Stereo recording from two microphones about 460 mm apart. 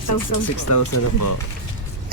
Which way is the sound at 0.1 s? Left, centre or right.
Left.